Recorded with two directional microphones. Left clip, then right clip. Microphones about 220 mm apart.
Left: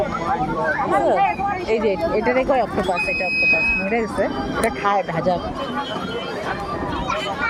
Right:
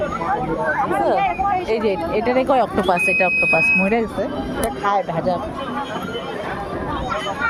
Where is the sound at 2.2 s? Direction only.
20° right (ahead or behind).